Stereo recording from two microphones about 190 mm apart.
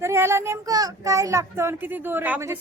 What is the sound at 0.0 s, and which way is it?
A woman's voice, 15° right (ahead or behind).